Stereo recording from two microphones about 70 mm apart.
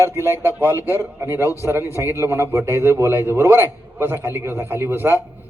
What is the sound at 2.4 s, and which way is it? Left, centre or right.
A man's voice, right.